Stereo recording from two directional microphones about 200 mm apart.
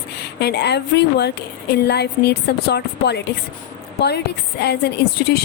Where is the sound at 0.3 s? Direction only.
55° left (ahead or behind).